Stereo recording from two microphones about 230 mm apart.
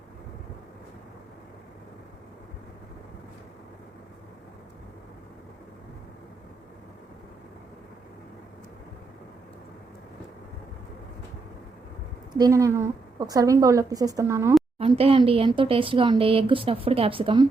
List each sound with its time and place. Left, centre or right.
12.4 s a woman's voice: centre
14.8 s speech: right